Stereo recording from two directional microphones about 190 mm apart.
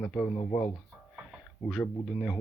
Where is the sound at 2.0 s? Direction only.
Centre (ahead or behind).